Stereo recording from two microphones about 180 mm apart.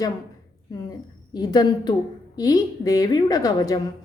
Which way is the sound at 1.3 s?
20° left (ahead or behind).